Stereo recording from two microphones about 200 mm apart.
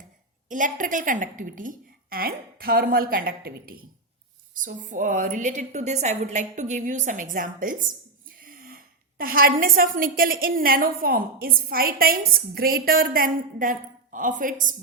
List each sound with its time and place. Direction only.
0.4 s a woman's voice: 40° right (ahead or behind)